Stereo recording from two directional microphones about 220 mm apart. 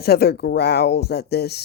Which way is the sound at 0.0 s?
45° left (ahead or behind).